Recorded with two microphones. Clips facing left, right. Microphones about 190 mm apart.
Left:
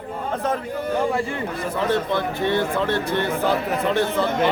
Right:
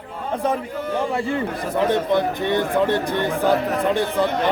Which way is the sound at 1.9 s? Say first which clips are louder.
Right 2 dB; 15° right (ahead or behind).